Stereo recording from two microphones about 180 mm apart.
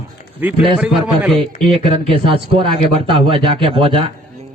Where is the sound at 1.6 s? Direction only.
30° right (ahead or behind).